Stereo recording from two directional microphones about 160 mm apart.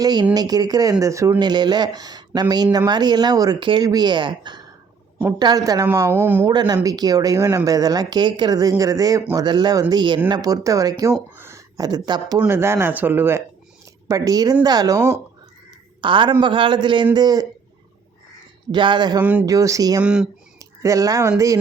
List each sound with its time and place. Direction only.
0.0 s speech: 25° right (ahead or behind)
6.5 s speech: 25° right (ahead or behind)
12.4 s a woman's voice: 15° right (ahead or behind)
18.7 s speech: 30° right (ahead or behind)
19.2 s speech: 10° right (ahead or behind)
19.5 s speech: 20° right (ahead or behind)
20.0 s speech: 5° right (ahead or behind)
20.6 s speech: 20° right (ahead or behind)